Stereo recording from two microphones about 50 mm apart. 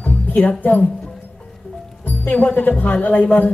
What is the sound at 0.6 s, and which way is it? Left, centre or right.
Speech, left.